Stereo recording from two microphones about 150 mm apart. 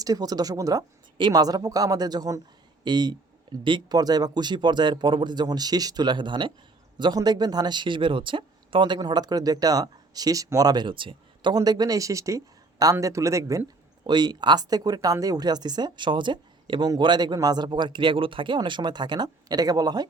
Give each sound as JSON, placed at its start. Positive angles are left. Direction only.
{"t": 0.0, "sound": "speech", "side_deg": -25}